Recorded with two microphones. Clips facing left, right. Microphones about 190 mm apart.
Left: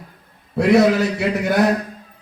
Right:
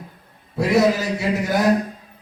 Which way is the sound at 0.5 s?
60° left (ahead or behind).